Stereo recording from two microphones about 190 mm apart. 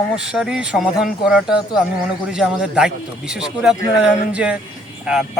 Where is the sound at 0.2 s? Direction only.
5° right (ahead or behind).